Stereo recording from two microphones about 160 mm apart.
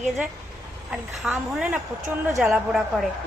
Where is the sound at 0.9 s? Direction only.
5° right (ahead or behind).